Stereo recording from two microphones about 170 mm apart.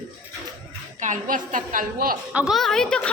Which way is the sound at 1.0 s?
50° right (ahead or behind).